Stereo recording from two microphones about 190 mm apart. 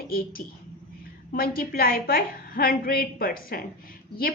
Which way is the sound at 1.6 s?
50° left (ahead or behind).